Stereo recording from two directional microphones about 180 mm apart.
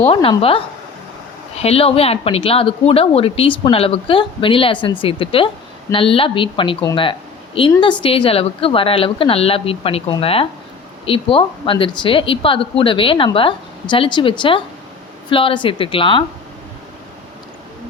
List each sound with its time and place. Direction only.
0.1 s a woman's voice: 30° left (ahead or behind)